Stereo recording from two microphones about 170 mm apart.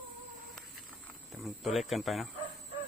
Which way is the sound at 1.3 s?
Centre (ahead or behind).